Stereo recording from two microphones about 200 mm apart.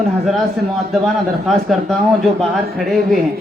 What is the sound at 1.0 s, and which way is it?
Speech, centre (ahead or behind).